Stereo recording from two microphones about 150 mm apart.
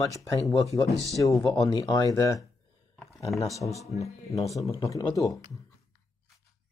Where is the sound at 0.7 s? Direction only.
20° right (ahead or behind).